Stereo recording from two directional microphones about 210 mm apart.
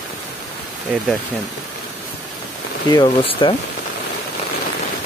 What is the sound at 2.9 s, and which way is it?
Speech, 20° left (ahead or behind).